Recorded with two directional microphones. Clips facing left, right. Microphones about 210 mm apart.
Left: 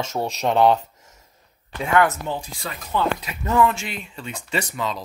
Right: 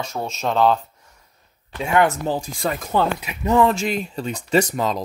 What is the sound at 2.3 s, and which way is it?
Speech, 45° right (ahead or behind).